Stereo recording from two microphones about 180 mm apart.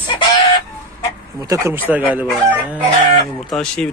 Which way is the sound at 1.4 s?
15° right (ahead or behind).